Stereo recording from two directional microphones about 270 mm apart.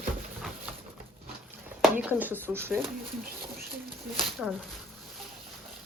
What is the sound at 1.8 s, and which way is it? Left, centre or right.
Speech, centre.